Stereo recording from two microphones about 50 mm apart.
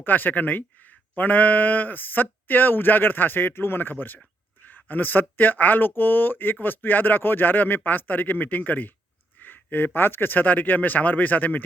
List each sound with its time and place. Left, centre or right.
0.0 s speech: left